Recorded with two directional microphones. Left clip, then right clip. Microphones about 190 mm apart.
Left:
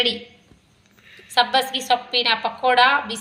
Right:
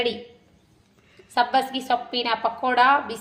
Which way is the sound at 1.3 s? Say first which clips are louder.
Left 3 dB; 45° right (ahead or behind).